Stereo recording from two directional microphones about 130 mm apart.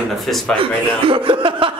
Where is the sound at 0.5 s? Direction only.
40° right (ahead or behind).